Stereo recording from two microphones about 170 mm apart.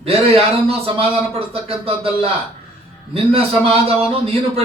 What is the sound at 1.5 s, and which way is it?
Speech, 35° right (ahead or behind).